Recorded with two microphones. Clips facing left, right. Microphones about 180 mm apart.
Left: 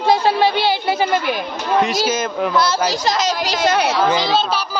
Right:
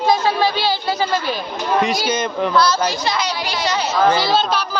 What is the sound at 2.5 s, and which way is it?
Speech, 25° left (ahead or behind).